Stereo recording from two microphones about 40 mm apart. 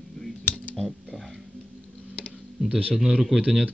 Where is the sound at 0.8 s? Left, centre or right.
Centre.